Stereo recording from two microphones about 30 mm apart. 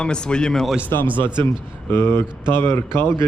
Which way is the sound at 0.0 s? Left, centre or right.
Left.